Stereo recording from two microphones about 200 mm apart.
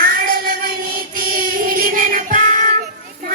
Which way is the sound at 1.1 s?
45° right (ahead or behind).